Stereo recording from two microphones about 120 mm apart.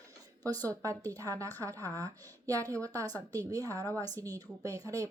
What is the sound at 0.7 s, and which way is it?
A woman's voice, 25° right (ahead or behind).